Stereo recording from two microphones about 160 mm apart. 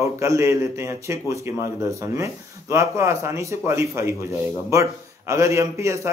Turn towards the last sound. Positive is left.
turn(degrees=-20)  # may be behind; listen again after turning